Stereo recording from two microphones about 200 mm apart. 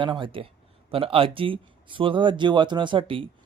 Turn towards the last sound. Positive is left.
turn(degrees=-25)  # may be behind; listen again after turning